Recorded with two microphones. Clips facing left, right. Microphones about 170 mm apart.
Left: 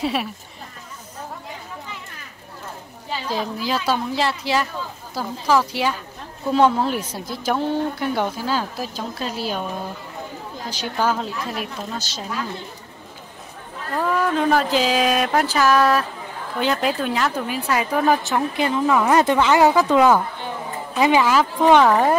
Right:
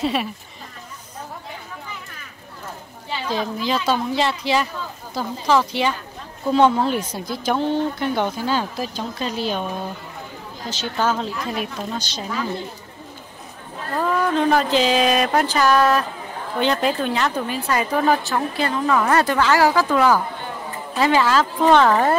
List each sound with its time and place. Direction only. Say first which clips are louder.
0.0 s speech: right 1 dB; 5° left (ahead or behind)
3.3 s speech: right 2 dB; 5° left (ahead or behind)
10.7 s speech: even; 10° left (ahead or behind)
13.9 s speech: right 1 dB; centre (ahead or behind)
18.2 s speech: left 1 dB; 15° left (ahead or behind)